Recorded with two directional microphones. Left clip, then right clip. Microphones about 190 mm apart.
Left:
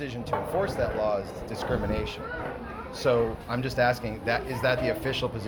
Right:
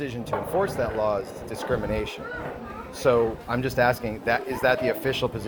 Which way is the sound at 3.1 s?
65° right (ahead or behind).